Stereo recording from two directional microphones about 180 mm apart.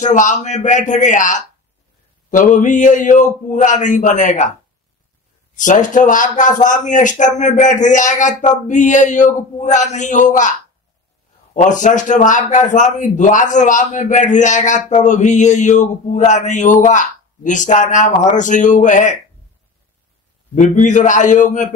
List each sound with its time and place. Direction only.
0.0 s a man's voice: 45° left (ahead or behind)
5.6 s a man's voice: 45° left (ahead or behind)
11.5 s a man's voice: 45° left (ahead or behind)
20.5 s a man's voice: 45° left (ahead or behind)